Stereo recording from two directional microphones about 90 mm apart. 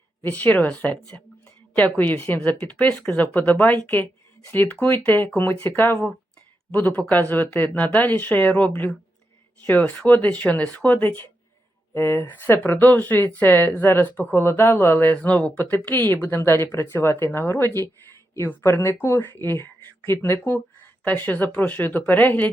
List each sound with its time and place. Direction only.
0.2 s speech: 20° left (ahead or behind)